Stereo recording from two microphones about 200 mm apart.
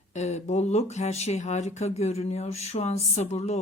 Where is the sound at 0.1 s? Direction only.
35° left (ahead or behind).